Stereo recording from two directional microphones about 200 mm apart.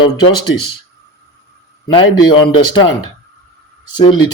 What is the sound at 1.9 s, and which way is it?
Speech, 25° left (ahead or behind).